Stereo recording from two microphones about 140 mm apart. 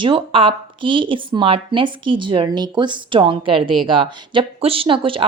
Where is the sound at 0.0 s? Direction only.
40° right (ahead or behind).